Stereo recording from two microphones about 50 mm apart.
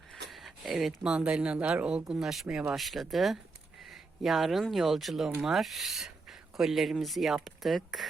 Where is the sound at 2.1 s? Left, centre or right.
Centre.